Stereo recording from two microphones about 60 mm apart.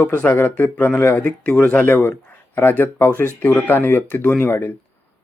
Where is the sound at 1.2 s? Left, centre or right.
Left.